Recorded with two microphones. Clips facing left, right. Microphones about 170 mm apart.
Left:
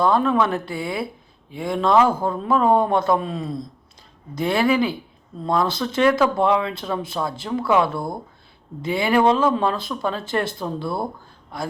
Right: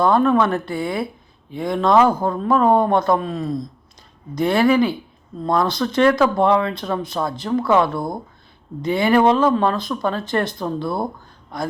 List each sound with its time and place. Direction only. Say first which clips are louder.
0.0 s speech: right 3 dB; centre (ahead or behind)
3.3 s speech: right 4 dB; 25° left (ahead or behind)
4.4 s speech: right 3 dB; centre (ahead or behind)
7.9 s speech: right 2 dB; 20° right (ahead or behind)
8.8 s speech: right 3 dB; 5° left (ahead or behind)